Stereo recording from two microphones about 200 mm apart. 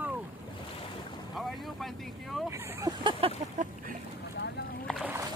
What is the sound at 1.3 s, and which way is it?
Boat, centre (ahead or behind).